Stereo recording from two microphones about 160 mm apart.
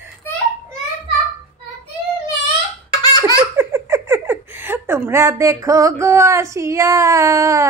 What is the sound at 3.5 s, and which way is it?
Speech, 15° right (ahead or behind).